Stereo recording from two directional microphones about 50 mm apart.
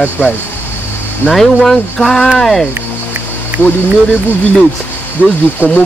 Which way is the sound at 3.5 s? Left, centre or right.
Right.